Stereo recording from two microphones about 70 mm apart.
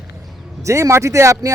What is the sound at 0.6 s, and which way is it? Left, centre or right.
Speech, right.